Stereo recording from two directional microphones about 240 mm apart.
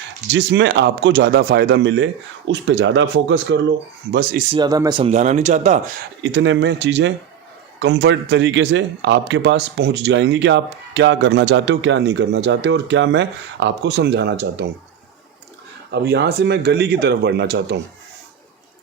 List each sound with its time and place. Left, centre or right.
0.3 s speech: right
4.1 s speech: right
4.5 s speech: centre
6.2 s speech: right
15.9 s speech: right